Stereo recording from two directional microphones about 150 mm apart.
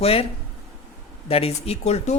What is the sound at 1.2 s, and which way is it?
Speech, 40° left (ahead or behind).